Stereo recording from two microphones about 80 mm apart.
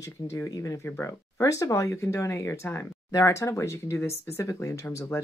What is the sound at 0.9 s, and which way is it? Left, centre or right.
Speech, left.